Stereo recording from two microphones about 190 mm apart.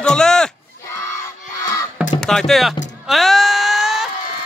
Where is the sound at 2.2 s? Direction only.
Centre (ahead or behind).